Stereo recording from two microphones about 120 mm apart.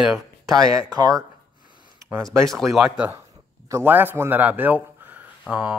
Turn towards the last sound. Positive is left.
turn(degrees=-5)  # may be behind; listen again after turning